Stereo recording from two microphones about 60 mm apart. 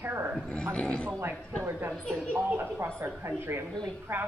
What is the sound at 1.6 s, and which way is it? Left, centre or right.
A woman's voice, right.